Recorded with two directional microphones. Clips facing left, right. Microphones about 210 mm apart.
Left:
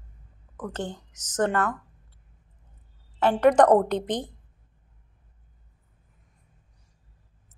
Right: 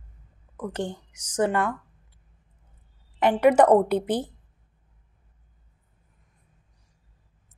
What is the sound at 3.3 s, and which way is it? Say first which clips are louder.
Speech: right 1 dB; 10° right (ahead or behind).